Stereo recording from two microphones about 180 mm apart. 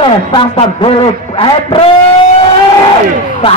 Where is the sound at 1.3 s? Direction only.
30° left (ahead or behind).